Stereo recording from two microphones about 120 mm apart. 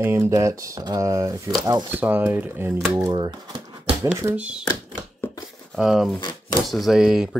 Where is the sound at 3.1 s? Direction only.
40° right (ahead or behind).